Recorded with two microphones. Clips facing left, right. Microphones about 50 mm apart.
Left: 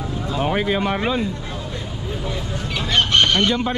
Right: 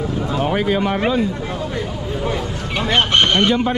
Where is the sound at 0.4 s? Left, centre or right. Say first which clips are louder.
Right 1 dB; right.